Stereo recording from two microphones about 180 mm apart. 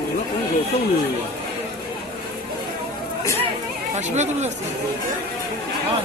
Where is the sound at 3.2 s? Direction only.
15° left (ahead or behind).